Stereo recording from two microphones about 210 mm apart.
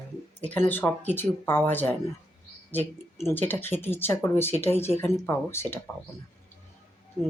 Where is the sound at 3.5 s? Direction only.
10° left (ahead or behind).